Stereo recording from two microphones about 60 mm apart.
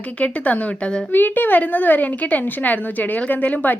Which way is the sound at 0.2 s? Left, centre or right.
Left.